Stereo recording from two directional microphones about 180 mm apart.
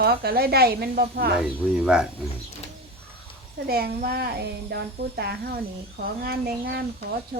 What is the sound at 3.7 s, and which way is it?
A woman's voice, 60° right (ahead or behind).